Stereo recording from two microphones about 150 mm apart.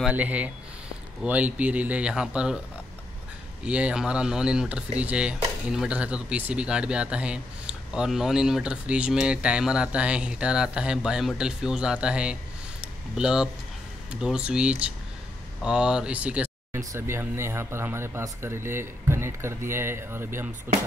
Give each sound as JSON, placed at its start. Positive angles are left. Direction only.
{"t": 0.0, "sound": "speech", "side_deg": -10}
{"t": 3.6, "sound": "speech", "side_deg": -10}